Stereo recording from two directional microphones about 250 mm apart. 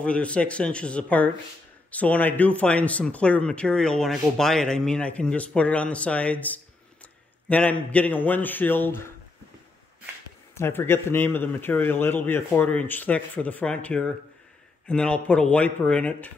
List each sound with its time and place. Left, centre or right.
0.0 s speech: centre
10.5 s speech: centre